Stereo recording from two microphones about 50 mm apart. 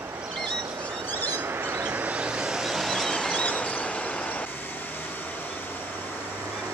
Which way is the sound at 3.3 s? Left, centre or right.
Left.